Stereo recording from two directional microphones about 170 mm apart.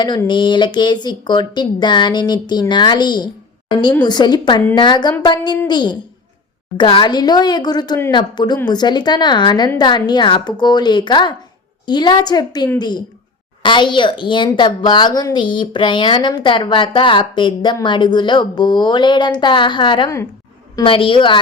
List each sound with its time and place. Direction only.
0.0 s a woman's voice: 25° left (ahead or behind)